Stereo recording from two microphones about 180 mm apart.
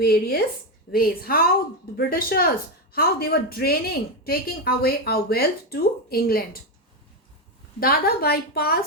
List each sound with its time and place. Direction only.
0.0 s speech: 60° left (ahead or behind)
7.8 s speech: 55° left (ahead or behind)